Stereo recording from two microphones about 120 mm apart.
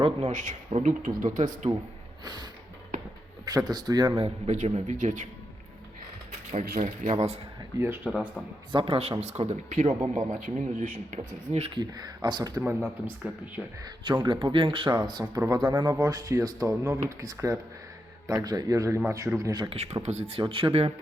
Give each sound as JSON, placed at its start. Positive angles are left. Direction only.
{"t": 0.2, "sound": "speech", "side_deg": -90}
{"t": 2.2, "sound": "speech", "side_deg": -35}
{"t": 4.2, "sound": "a man's voice", "side_deg": -70}
{"t": 6.5, "sound": "speech", "side_deg": -80}
{"t": 7.8, "sound": "speech", "side_deg": -20}
{"t": 8.1, "sound": "speech", "side_deg": -5}
{"t": 8.7, "sound": "speech", "side_deg": -50}
{"t": 9.2, "sound": "speech", "side_deg": -70}
{"t": 11.7, "sound": "speech", "side_deg": -35}
{"t": 13.1, "sound": "speech", "side_deg": -15}
{"t": 13.8, "sound": "speech", "side_deg": -40}
{"t": 15.6, "sound": "speech", "side_deg": -40}
{"t": 19.7, "sound": "speech", "side_deg": -70}
{"t": 20.4, "sound": "speech", "side_deg": -45}